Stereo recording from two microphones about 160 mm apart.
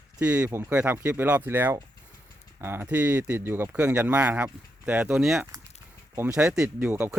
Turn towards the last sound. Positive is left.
turn(degrees=-10)  # may be behind; listen again after turning